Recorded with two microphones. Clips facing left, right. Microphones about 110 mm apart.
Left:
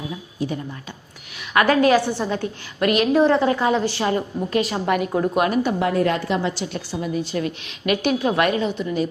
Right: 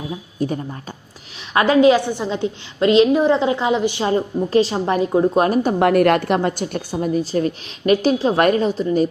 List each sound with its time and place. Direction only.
0.3 s speech: 40° right (ahead or behind)
1.5 s a woman's voice: 20° right (ahead or behind); by 5.7 s 35° right (ahead or behind)
5.8 s a woman's voice: 65° right (ahead or behind); by 9.0 s 40° right (ahead or behind)